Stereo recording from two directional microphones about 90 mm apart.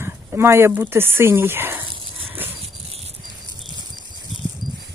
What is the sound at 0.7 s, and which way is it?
Speech, 25° right (ahead or behind).